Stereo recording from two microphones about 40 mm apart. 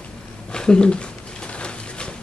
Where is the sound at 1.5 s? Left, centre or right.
Left.